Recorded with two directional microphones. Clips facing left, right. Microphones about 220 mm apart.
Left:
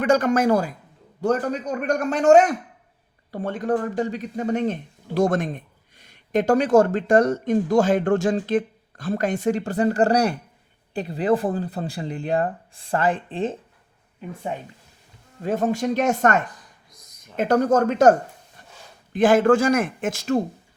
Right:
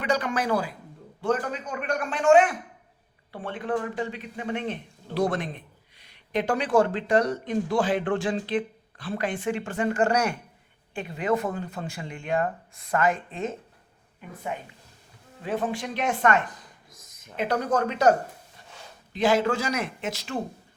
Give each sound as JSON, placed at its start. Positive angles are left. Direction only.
{"t": 0.0, "sound": "speech", "side_deg": 45}
{"t": 15.4, "sound": "speech", "side_deg": 45}
{"t": 19.1, "sound": "speech", "side_deg": 50}